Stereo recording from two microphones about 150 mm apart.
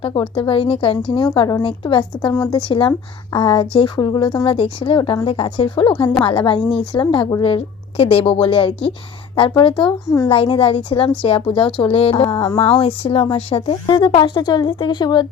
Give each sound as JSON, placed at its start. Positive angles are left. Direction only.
{"t": 0.0, "sound": "speech", "side_deg": 35}
{"t": 1.3, "sound": "speech", "side_deg": 25}